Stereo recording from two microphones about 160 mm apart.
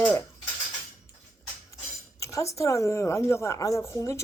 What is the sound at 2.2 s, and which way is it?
Speech, 20° left (ahead or behind).